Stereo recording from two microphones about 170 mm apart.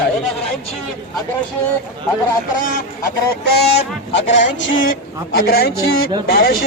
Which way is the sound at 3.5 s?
90° left.